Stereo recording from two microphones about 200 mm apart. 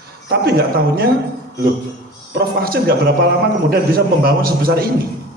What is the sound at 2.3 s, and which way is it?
A man's voice, 50° right (ahead or behind).